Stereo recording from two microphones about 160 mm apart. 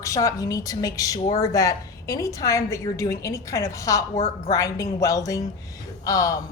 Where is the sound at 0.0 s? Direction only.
20° left (ahead or behind).